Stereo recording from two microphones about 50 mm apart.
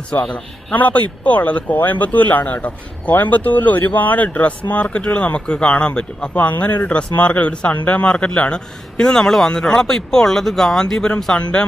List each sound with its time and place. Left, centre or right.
0.1 s speech: left
6.3 s speech: left; by 11.3 s centre